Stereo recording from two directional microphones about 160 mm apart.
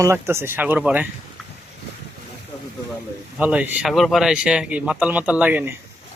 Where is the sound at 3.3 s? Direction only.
10° right (ahead or behind).